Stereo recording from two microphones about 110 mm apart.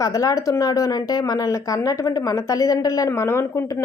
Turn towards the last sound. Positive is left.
turn(degrees=25)  # may be behind; listen again after turning